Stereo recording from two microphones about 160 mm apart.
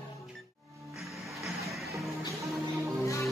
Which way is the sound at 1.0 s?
Centre (ahead or behind).